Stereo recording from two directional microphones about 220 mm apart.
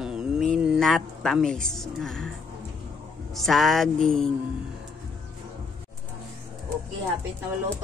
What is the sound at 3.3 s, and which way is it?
Speech, centre (ahead or behind).